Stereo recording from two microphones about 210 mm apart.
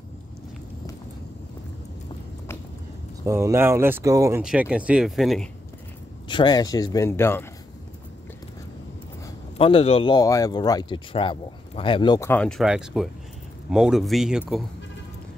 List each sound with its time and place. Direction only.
3.3 s speech: 15° right (ahead or behind)
4.4 s speech: 5° right (ahead or behind)
6.2 s a man's voice: 20° left (ahead or behind)
9.6 s speech: 25° left (ahead or behind); by 14.4 s centre (ahead or behind)